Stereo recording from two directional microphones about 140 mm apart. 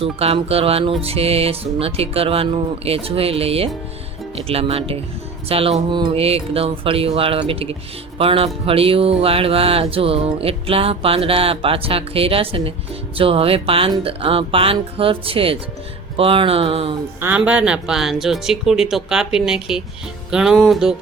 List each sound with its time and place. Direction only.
0.0 s music: 45° right (ahead or behind)
8.2 s speech: 40° right (ahead or behind)
8.6 s music: 45° right (ahead or behind)
13.1 s speech: 40° right (ahead or behind)
17.2 s speech: 10° right (ahead or behind)